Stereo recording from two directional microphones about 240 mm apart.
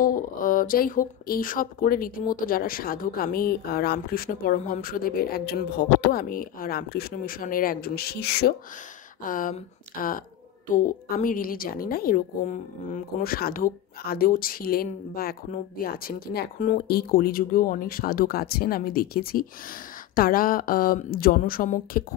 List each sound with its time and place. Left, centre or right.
0.0 s a woman's voice: left